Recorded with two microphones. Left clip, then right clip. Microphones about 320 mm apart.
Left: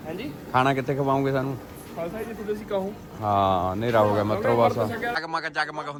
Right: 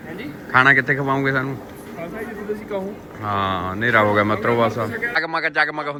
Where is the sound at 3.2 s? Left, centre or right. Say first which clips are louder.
Even; centre.